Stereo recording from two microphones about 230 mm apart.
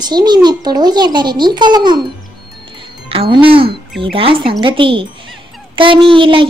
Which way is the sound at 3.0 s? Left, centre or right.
Right.